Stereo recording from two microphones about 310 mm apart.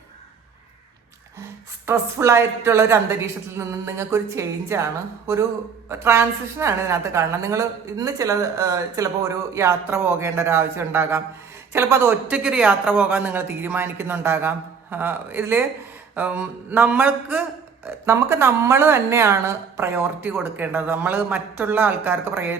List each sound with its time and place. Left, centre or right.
1.9 s a woman's voice: centre
16.1 s a sound: centre
17.8 s a woman's voice: centre